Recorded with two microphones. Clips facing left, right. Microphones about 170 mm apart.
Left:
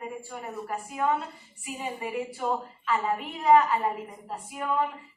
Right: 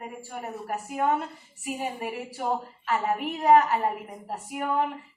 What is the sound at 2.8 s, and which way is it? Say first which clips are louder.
Speech: right 1 dB; 65° right (ahead or behind).